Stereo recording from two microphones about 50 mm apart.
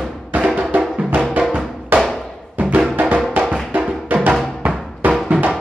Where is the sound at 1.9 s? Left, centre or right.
Right.